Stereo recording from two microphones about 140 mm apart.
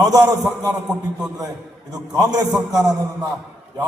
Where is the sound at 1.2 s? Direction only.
25° right (ahead or behind).